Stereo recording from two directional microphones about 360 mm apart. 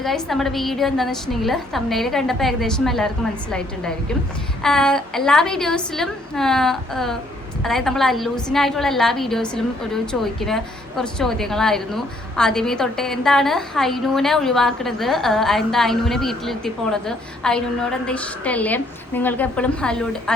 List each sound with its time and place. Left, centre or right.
0.0 s a woman's voice: centre
4.6 s a woman's voice: centre